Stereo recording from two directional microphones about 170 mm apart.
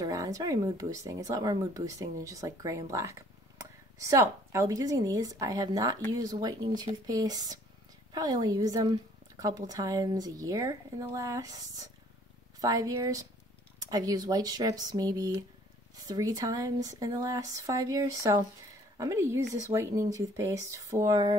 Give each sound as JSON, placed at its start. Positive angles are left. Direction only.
{"t": 0.0, "sound": "a woman's voice", "side_deg": -20}